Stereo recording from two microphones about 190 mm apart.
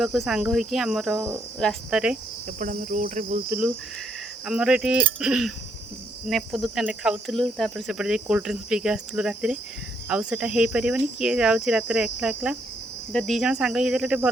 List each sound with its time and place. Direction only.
0.0 s speech: centre (ahead or behind)
2.6 s cricket: 40° right (ahead or behind)
4.4 s speech: 5° right (ahead or behind)